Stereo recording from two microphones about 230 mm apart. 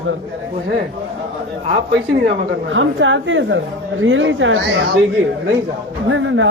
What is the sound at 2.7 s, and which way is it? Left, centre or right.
A woman's voice, right.